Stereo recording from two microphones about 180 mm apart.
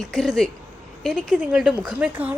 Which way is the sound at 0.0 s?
Centre (ahead or behind).